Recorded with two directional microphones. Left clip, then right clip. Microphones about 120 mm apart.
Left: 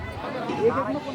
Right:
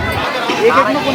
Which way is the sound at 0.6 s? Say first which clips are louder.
Right 12 dB; 35° right (ahead or behind).